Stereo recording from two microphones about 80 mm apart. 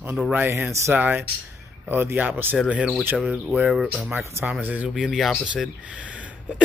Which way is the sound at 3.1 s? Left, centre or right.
Centre.